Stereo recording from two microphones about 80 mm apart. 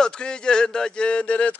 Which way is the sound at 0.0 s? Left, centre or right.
Centre.